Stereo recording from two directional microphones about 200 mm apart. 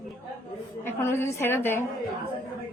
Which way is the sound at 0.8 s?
10° left (ahead or behind).